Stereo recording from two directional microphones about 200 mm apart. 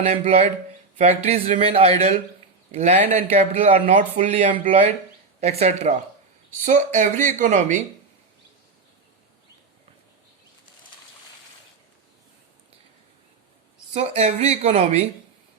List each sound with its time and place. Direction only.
0.3 s speech: 35° right (ahead or behind)
13.9 s speech: 35° right (ahead or behind)